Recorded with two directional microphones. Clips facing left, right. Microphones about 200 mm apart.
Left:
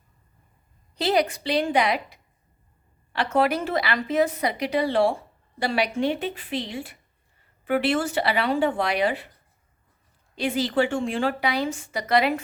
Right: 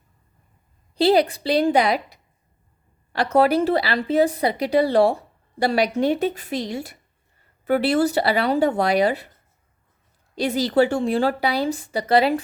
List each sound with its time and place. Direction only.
0.9 s a woman's voice: 30° right (ahead or behind)
10.3 s a woman's voice: 40° right (ahead or behind)